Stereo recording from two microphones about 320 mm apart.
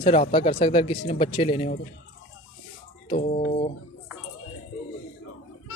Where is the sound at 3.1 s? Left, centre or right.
Centre.